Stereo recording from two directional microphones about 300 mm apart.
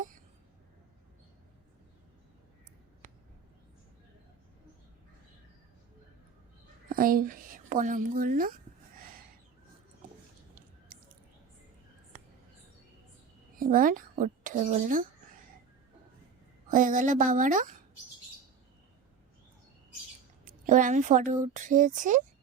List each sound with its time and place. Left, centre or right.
3.0 s a sound: right
6.8 s a woman's voice: right
9.0 s a sound: right
13.6 s speech: right
16.6 s speech: right
20.4 s speech: right